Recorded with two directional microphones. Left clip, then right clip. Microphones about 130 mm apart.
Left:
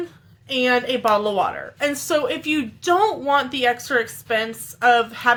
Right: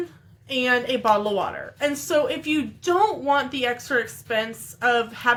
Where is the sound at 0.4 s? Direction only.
25° left (ahead or behind).